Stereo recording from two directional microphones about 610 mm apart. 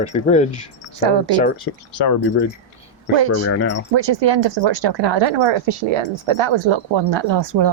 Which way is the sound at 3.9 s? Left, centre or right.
Right.